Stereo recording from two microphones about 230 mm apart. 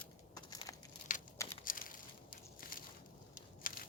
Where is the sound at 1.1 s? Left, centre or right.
Left.